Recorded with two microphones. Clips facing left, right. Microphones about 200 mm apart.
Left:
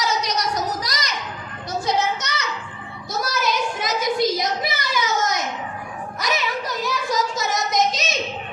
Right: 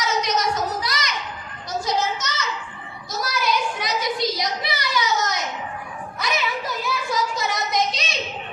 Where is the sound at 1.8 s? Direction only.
60° left (ahead or behind).